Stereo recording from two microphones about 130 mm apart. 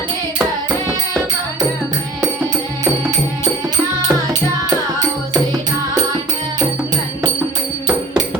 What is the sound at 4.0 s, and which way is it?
Music, 30° right (ahead or behind).